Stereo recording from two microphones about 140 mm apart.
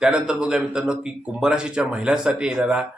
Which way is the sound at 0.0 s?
5° right (ahead or behind).